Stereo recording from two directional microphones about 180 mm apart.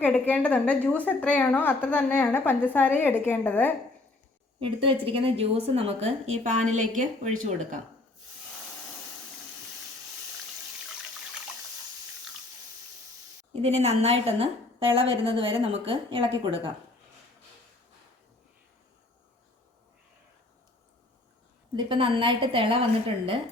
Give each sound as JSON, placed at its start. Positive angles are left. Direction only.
{"t": 0.0, "sound": "a woman's voice", "side_deg": 10}
{"t": 4.6, "sound": "a woman's voice", "side_deg": -30}
{"t": 13.5, "sound": "a woman's voice", "side_deg": -35}
{"t": 21.8, "sound": "a woman's voice", "side_deg": -30}